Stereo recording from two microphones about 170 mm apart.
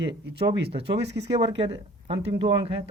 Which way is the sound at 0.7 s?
35° right (ahead or behind).